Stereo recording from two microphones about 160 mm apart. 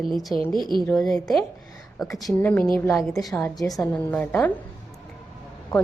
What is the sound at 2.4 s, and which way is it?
Speech, 10° left (ahead or behind).